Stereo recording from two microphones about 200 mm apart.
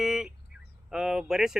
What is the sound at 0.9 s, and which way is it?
Speech, 5° right (ahead or behind).